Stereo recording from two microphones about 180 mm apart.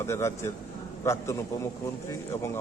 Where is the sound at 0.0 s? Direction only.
15° left (ahead or behind).